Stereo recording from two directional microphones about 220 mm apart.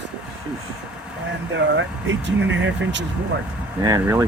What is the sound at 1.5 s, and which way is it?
Speech, 55° right (ahead or behind).